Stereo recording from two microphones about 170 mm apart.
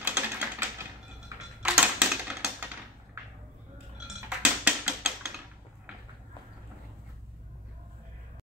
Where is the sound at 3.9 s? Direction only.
5° right (ahead or behind).